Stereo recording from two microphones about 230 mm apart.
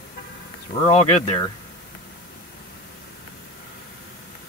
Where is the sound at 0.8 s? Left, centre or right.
Left.